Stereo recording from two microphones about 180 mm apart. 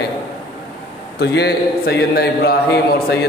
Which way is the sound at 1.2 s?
70° left (ahead or behind).